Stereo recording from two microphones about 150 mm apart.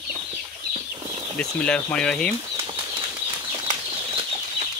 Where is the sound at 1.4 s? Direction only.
5° left (ahead or behind).